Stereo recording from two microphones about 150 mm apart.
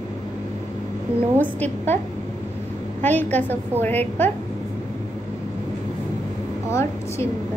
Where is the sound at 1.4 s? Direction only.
10° left (ahead or behind).